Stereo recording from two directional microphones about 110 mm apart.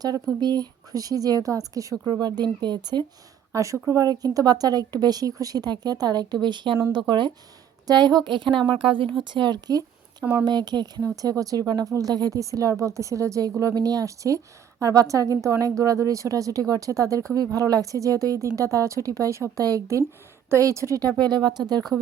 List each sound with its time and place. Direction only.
0.3 s speech: 40° right (ahead or behind)
3.5 s speech: 30° right (ahead or behind)
21.2 s speech: 40° right (ahead or behind)